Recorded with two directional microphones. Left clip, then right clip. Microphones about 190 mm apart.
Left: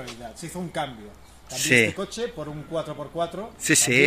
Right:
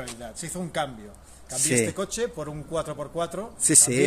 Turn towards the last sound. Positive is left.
turn(degrees=0)  # may be behind; listen again after turning